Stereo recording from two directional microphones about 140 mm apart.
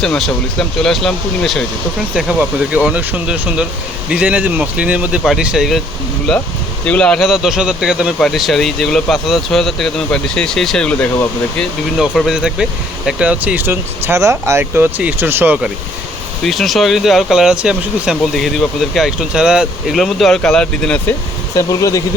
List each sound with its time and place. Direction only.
0.0 s speech: 5° left (ahead or behind)
11.9 s speech: centre (ahead or behind)
16.4 s speech: centre (ahead or behind)
21.5 s speech: 25° left (ahead or behind)